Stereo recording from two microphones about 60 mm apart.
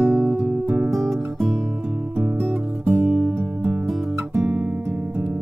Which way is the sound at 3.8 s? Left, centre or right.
Centre.